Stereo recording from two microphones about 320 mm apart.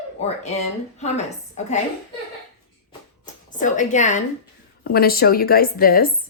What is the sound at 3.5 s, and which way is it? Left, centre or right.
A woman's voice, left.